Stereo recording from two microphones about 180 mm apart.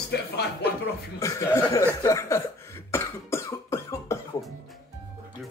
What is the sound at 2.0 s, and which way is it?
Cough, 15° left (ahead or behind).